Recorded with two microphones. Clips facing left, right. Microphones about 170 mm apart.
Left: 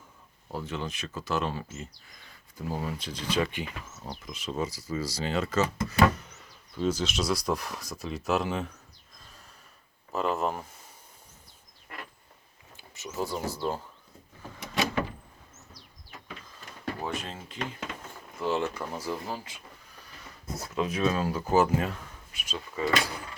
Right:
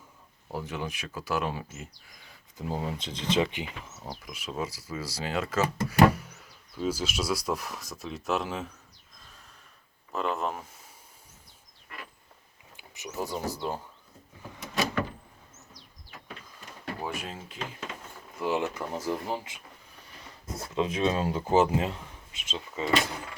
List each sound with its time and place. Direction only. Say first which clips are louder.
0.5 s speech: even; 15° right (ahead or behind)
2.6 s speech: right 1 dB; 20° right (ahead or behind)
4.1 s speech: left 2 dB; 10° right (ahead or behind)
10.1 s speech: left 2 dB; centre (ahead or behind)
12.7 s speech: even; 15° right (ahead or behind)
17.0 s speech: right 2 dB; 10° right (ahead or behind)
20.6 s speech: right 1 dB; 25° right (ahead or behind)